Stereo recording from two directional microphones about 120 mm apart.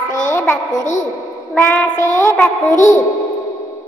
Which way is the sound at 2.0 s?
20° left (ahead or behind).